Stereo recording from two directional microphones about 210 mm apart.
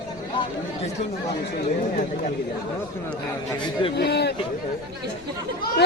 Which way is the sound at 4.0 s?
55° left (ahead or behind).